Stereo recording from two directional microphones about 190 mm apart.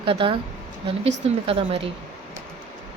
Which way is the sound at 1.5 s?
30° right (ahead or behind).